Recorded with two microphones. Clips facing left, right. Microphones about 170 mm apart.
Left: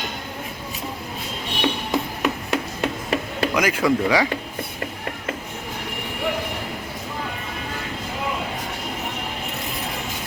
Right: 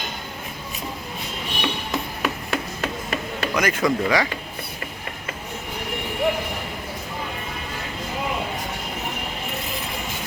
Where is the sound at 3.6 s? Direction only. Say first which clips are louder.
Left 1 dB; 10° left (ahead or behind).